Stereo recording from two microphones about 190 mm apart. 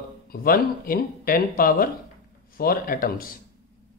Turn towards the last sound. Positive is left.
turn(degrees=50)  # may be behind; listen again after turning